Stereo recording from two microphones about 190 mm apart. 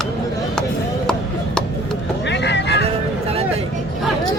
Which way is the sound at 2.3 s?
65° left (ahead or behind).